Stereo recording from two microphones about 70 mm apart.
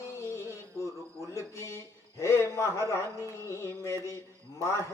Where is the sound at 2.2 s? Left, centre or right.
Left.